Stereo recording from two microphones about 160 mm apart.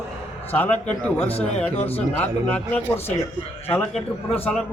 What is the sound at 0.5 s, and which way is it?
Speech, 10° left (ahead or behind).